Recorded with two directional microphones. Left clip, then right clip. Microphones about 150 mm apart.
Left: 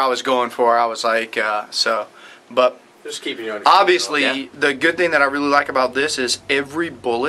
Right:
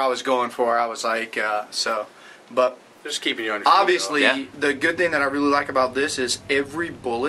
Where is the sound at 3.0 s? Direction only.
10° right (ahead or behind).